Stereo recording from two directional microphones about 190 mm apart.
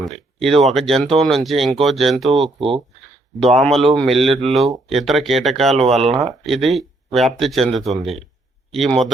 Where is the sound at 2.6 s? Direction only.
30° right (ahead or behind).